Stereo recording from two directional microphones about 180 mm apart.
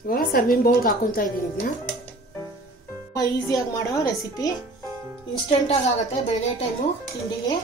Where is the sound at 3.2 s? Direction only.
20° left (ahead or behind).